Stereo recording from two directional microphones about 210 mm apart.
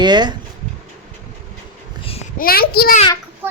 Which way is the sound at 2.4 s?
45° left (ahead or behind).